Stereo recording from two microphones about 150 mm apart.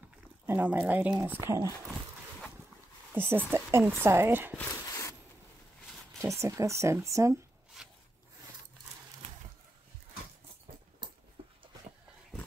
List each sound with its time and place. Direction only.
0.5 s speech: 10° right (ahead or behind)
3.1 s speech: 15° right (ahead or behind)
4.8 s a sound: 20° left (ahead or behind)
6.1 s speech: 20° right (ahead or behind)
7.8 s rub: centre (ahead or behind)
11.4 s a sound: 40° right (ahead or behind)